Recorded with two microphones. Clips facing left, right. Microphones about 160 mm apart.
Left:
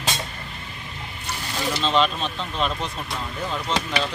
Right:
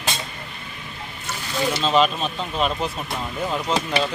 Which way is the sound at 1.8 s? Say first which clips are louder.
Right 2 dB; 5° right (ahead or behind).